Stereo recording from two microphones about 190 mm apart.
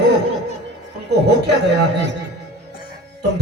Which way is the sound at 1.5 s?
60° right (ahead or behind).